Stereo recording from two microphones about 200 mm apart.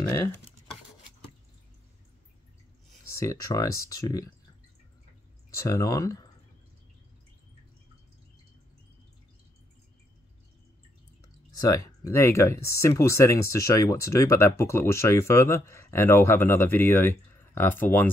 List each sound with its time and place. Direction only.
3.1 s speech: 15° left (ahead or behind)
5.5 s speech: 15° left (ahead or behind)
11.5 s speech: 15° left (ahead or behind)